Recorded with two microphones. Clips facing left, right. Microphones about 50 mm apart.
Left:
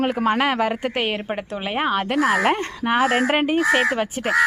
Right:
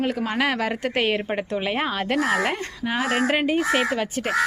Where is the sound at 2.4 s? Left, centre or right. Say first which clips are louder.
Left 5 dB; left.